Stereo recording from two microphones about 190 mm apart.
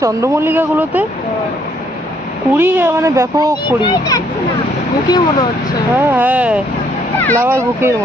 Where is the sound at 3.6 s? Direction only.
20° left (ahead or behind).